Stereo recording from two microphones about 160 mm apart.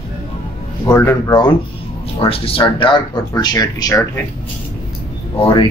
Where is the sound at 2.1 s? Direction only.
35° left (ahead or behind).